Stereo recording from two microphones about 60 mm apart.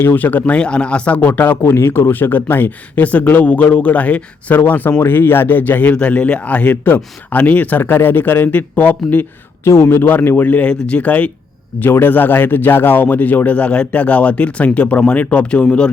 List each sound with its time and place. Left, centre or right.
0.0 s speech: left
9.6 s speech: left
11.8 s speech: left; by 15.9 s centre